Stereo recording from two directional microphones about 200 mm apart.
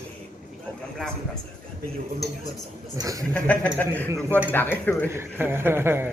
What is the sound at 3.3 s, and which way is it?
Speech, 10° left (ahead or behind).